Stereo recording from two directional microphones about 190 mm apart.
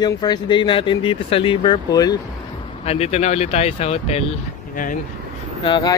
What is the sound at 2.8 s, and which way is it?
Speech, 30° left (ahead or behind).